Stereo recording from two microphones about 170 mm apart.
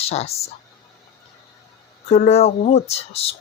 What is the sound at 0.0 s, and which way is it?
Speech, 40° left (ahead or behind).